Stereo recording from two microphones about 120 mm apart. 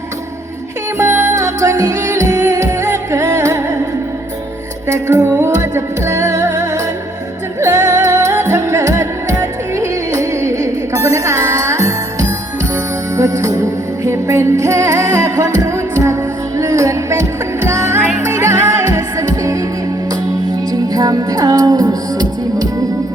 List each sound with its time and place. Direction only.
0.9 s music: 25° right (ahead or behind)
5.0 s music: 25° right (ahead or behind)
13.1 s music: 25° right (ahead or behind)
20.9 s music: 30° right (ahead or behind)